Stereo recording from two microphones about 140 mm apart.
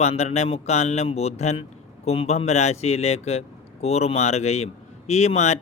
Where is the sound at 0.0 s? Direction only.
50° left (ahead or behind).